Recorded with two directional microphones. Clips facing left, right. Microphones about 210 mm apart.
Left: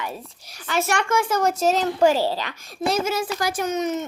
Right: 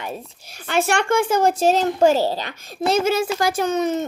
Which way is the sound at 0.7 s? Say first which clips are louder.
Right 3 dB; 30° right (ahead or behind).